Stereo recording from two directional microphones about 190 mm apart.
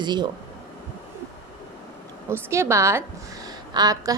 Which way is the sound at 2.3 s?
15° right (ahead or behind).